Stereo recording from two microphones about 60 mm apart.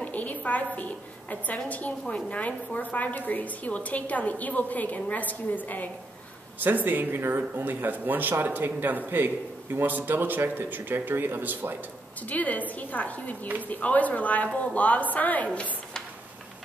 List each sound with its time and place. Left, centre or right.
0.0 s a sound: left
0.7 s a woman's voice: left
6.6 s speech: right
12.2 s a woman's voice: left